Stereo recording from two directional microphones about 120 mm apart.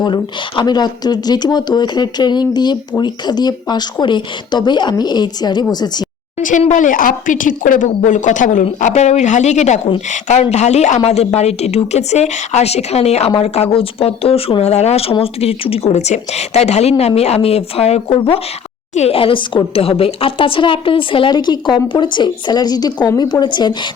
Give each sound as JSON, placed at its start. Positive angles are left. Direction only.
{"t": 0.0, "sound": "a woman's voice", "side_deg": 40}
{"t": 6.4, "sound": "speech", "side_deg": 85}
{"t": 8.9, "sound": "speech", "side_deg": 70}
{"t": 10.1, "sound": "speech", "side_deg": 85}
{"t": 10.4, "sound": "a woman's voice", "side_deg": 65}